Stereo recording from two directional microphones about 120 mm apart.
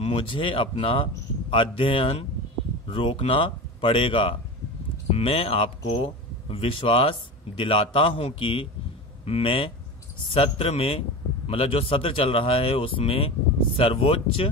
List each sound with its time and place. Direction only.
0.0 s a man's voice: 50° left (ahead or behind)